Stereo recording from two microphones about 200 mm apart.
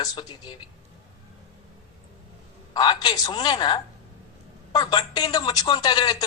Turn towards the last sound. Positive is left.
turn(degrees=20)  # may be behind; listen again after turning